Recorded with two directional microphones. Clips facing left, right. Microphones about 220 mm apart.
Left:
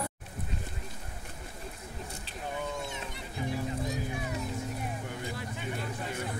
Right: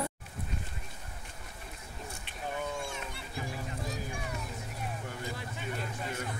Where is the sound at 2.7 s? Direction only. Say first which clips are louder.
Left 1 dB; 20° left (ahead or behind).